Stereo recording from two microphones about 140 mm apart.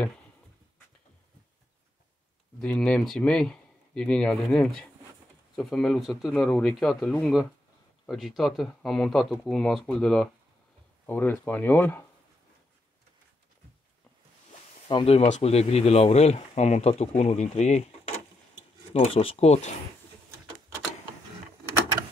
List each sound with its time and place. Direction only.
2.6 s speech: 10° left (ahead or behind)
14.9 s speech: 40° left (ahead or behind)